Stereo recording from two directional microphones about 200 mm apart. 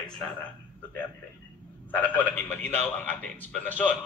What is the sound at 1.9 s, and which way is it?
Speech, 10° left (ahead or behind).